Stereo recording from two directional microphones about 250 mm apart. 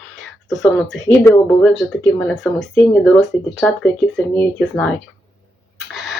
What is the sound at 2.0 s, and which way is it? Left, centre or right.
Speech, centre.